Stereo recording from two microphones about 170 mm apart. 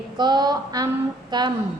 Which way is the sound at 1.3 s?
25° right (ahead or behind).